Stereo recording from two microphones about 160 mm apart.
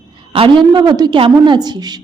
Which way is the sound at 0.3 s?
30° right (ahead or behind).